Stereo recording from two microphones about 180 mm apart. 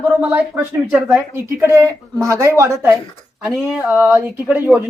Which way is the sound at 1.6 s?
15° right (ahead or behind).